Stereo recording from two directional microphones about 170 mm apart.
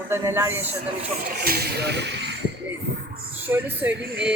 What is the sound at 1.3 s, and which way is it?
Speech, 65° right (ahead or behind).